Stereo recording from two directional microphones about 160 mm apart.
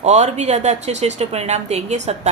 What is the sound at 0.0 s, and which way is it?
Speech, 45° right (ahead or behind).